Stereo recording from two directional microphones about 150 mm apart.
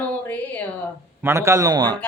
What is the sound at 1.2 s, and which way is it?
Speech, 20° right (ahead or behind).